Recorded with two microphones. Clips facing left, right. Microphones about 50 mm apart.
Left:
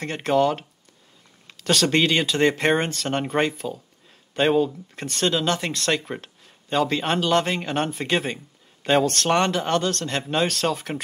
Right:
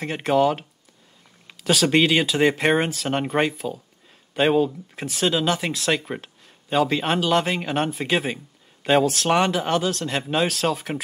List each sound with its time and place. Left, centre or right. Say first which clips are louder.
0.0 s speech: right 1 dB; centre